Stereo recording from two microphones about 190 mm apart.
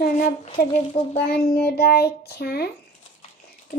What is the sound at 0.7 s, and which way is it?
Speech, 35° left (ahead or behind).